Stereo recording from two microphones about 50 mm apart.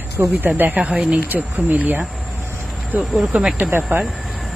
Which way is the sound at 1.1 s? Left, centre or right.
Right.